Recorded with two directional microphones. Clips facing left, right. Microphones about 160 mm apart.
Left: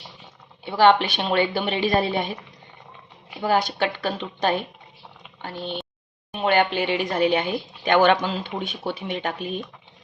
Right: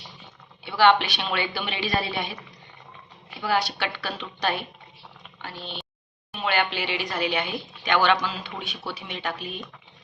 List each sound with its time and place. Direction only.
0.8 s a woman's voice: 45° left (ahead or behind)
3.4 s a woman's voice: 45° left (ahead or behind)